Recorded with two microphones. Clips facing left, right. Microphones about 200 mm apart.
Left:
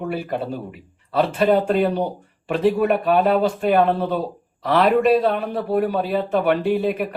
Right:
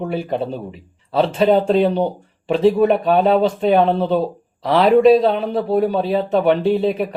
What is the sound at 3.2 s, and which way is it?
A man's voice, 25° right (ahead or behind).